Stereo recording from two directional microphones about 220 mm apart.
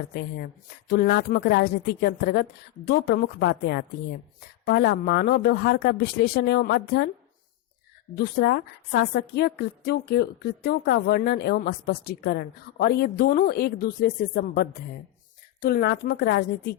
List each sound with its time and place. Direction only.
0.1 s a woman's voice: 45° left (ahead or behind)
8.1 s a woman's voice: 45° left (ahead or behind)